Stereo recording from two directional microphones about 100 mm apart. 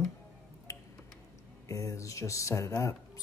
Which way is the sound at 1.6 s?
30° left (ahead or behind).